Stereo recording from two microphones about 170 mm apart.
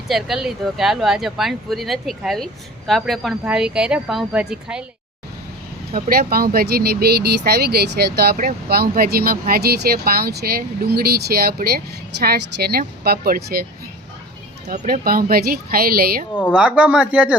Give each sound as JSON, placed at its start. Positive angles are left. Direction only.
{"t": 0.1, "sound": "speech", "side_deg": 0}
{"t": 5.9, "sound": "speech", "side_deg": -60}
{"t": 15.0, "sound": "speech", "side_deg": -60}
{"t": 16.5, "sound": "speech", "side_deg": -5}